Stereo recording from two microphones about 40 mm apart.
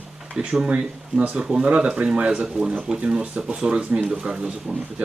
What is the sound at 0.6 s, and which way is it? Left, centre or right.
Speech, right.